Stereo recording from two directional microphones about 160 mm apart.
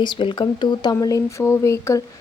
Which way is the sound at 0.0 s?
30° left (ahead or behind).